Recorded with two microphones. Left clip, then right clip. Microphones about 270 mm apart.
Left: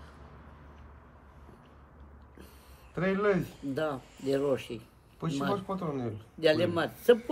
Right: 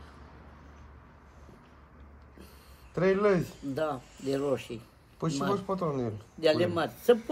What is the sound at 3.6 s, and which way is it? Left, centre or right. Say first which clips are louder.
A man's voice: right 1 dB; centre.